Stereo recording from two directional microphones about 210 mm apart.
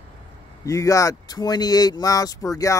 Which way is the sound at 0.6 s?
15° left (ahead or behind).